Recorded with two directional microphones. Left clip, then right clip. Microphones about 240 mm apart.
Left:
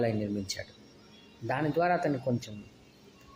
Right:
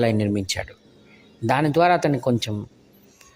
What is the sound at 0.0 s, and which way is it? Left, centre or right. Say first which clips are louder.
Speech: right 9 dB; right.